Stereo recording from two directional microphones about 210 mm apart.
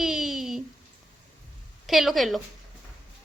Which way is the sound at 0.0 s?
Centre (ahead or behind).